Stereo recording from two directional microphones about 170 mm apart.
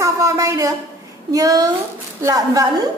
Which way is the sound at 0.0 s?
20° right (ahead or behind).